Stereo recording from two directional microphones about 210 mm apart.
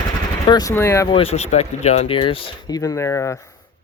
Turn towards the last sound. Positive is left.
turn(degrees=10)  # may be behind; listen again after turning